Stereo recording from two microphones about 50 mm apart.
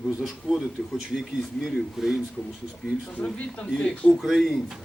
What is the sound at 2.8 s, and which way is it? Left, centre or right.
Speech, centre.